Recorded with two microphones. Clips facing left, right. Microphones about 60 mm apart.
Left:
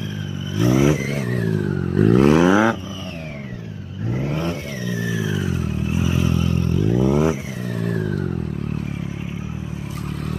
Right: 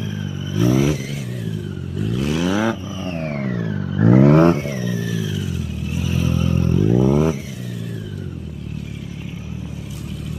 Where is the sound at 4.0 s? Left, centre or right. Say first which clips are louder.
Right 13 dB; right.